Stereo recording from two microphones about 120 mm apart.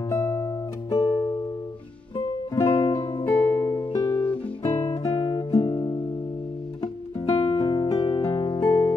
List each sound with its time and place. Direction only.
0.1 s music: 25° left (ahead or behind)
2.5 s music: 25° left (ahead or behind)
3.3 s music: 15° left (ahead or behind)
4.0 s guitar: 10° left (ahead or behind)
4.6 s music: 25° left (ahead or behind)